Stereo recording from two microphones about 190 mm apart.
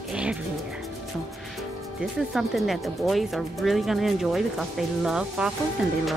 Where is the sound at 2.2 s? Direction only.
Centre (ahead or behind).